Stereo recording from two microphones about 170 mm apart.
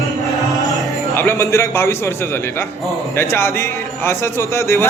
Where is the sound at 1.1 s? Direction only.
15° left (ahead or behind).